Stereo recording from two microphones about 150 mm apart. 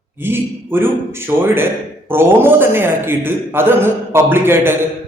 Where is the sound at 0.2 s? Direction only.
15° right (ahead or behind).